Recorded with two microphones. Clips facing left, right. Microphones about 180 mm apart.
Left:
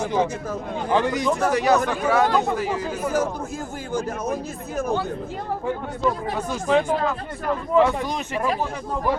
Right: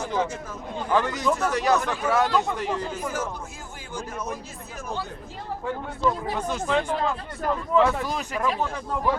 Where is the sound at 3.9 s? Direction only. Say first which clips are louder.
Left 7 dB; 45° left (ahead or behind).